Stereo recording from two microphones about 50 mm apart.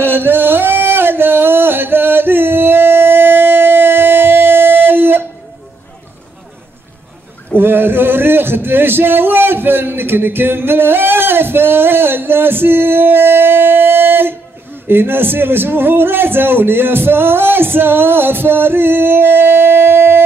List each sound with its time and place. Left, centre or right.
0.0 s music: right
7.5 s a man's voice: right